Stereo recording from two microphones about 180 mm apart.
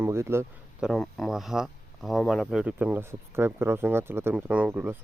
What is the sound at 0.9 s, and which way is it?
Speech, centre (ahead or behind).